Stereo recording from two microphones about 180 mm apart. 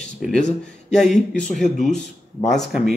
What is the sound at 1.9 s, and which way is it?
Speech, 40° left (ahead or behind).